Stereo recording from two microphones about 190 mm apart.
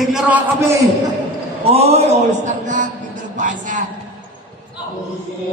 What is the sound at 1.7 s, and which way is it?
Speech, 35° right (ahead or behind).